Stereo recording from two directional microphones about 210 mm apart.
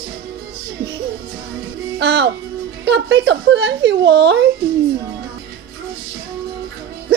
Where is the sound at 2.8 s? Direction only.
55° right (ahead or behind).